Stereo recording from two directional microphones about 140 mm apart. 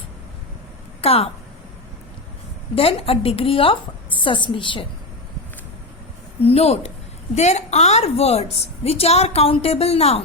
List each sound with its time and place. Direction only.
1.0 s a woman's voice: 45° left (ahead or behind)
2.7 s a woman's voice: 45° left (ahead or behind)
6.4 s a woman's voice: 45° left (ahead or behind)